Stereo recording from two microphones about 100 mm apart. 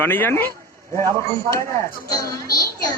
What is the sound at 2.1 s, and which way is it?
Speech, 35° left (ahead or behind).